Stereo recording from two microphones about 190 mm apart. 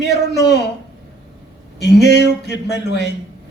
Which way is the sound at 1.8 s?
65° left (ahead or behind).